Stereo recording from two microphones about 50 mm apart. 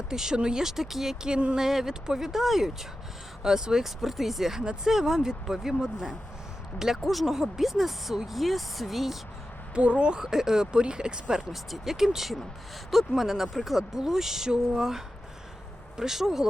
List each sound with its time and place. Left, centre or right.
0.1 s speech: centre
4.6 s speech: centre
9.7 s speech: right
10.2 s speech: centre